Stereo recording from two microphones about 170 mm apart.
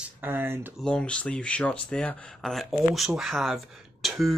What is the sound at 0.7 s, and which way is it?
Speech, 5° left (ahead or behind).